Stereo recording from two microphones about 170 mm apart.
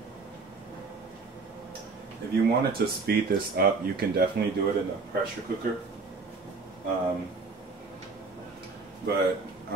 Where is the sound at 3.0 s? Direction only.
65° right (ahead or behind).